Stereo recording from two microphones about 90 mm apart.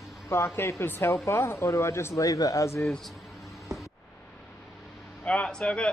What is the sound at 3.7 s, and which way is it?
Music, 40° right (ahead or behind).